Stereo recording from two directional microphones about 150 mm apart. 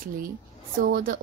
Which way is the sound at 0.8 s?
75° right (ahead or behind).